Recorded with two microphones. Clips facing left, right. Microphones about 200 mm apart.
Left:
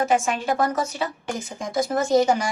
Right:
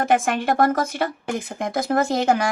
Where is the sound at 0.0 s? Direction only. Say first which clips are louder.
Right 2 dB; 55° right (ahead or behind).